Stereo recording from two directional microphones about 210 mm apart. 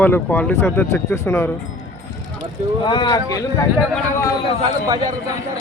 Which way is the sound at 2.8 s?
20° left (ahead or behind).